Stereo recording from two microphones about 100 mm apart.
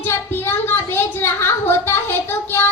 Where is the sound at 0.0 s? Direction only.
25° left (ahead or behind).